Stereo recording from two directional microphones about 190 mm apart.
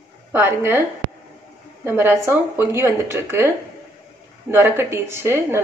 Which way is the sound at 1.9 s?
10° right (ahead or behind).